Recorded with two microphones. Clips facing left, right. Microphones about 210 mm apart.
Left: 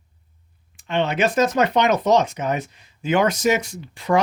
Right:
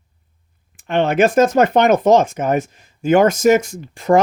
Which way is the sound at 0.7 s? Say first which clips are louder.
Right 6 dB; 50° right (ahead or behind).